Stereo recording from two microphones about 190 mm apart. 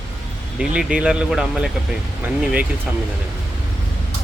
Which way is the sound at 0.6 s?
5° right (ahead or behind).